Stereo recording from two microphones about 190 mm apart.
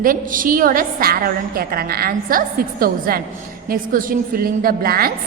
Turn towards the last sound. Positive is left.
turn(degrees=-50)  # may be behind; listen again after turning